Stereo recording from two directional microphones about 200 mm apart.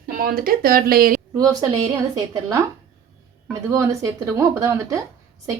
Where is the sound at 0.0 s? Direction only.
45° right (ahead or behind).